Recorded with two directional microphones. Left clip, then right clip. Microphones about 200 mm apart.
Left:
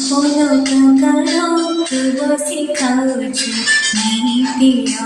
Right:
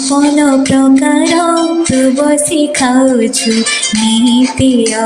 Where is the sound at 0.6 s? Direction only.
40° right (ahead or behind).